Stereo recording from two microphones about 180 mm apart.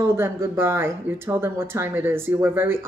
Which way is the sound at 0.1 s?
15° right (ahead or behind).